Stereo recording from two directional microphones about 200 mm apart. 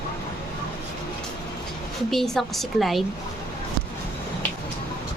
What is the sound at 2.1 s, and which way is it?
Speech, centre (ahead or behind).